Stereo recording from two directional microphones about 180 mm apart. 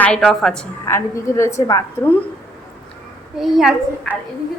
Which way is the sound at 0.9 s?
15° left (ahead or behind).